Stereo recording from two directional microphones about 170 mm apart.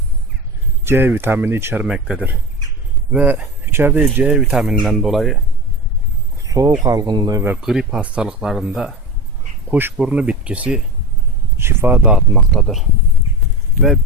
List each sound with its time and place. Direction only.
0.9 s speech: 15° right (ahead or behind)
6.4 s a sound: 20° right (ahead or behind)
6.8 s speech: 20° right (ahead or behind); by 12.8 s centre (ahead or behind)